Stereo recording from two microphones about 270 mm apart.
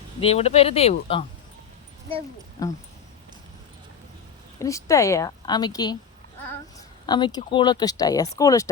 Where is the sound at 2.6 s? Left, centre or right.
Centre.